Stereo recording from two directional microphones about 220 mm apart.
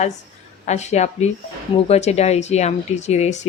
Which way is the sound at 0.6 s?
30° left (ahead or behind).